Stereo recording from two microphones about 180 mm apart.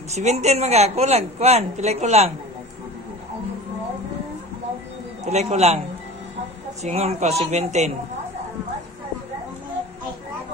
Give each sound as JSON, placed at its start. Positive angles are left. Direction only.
{"t": 0.1, "sound": "speech", "side_deg": -40}
{"t": 5.2, "sound": "speech", "side_deg": -40}
{"t": 6.8, "sound": "speech", "side_deg": -35}